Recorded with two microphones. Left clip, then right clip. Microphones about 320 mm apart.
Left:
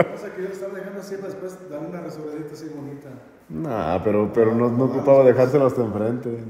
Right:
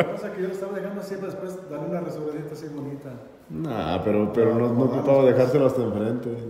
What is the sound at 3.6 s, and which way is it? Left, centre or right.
A man's voice, centre.